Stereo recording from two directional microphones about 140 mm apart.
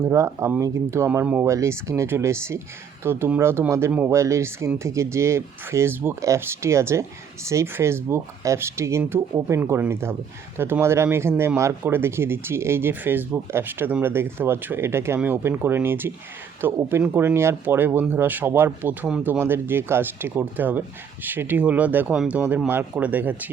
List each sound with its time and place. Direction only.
0.0 s speech: 20° right (ahead or behind)